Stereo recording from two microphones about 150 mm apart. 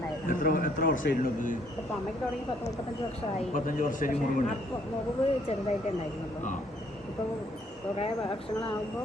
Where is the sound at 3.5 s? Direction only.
65° left (ahead or behind).